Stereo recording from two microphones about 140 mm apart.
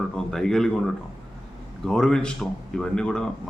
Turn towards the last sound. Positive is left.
turn(degrees=5)  # may be behind; listen again after turning